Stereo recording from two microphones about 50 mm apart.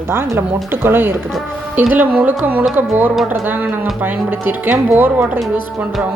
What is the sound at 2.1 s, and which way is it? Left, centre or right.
A woman's voice, right.